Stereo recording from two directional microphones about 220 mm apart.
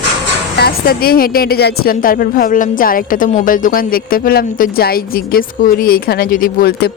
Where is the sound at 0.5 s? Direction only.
45° left (ahead or behind).